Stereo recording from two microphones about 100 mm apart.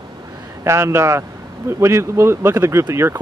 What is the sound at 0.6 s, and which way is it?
Speech, 25° right (ahead or behind).